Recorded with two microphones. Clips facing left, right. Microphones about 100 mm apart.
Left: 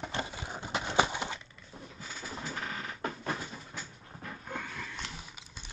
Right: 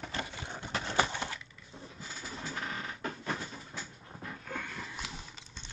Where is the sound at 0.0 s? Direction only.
20° left (ahead or behind).